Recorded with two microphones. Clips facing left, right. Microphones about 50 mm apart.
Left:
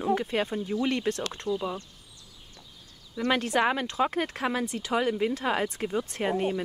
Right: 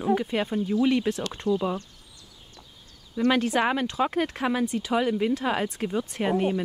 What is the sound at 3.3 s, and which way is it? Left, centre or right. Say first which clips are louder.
Speech: right 2 dB; centre.